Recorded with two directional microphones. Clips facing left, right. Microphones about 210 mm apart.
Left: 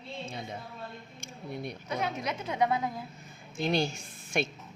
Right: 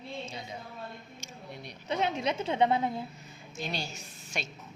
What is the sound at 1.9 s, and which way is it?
A woman's voice, 25° right (ahead or behind).